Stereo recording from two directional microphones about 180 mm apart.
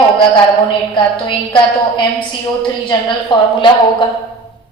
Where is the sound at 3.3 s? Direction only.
25° left (ahead or behind).